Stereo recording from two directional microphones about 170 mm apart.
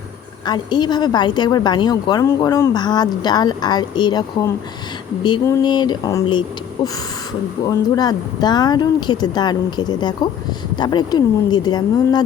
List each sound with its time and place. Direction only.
0.4 s a woman's voice: 25° left (ahead or behind)
7.6 s a woman's voice: 25° left (ahead or behind)